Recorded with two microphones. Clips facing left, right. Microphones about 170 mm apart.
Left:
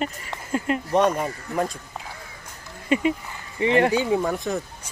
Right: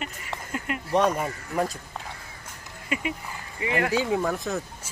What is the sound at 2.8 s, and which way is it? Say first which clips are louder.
Speech: left 8 dB; 30° left (ahead or behind).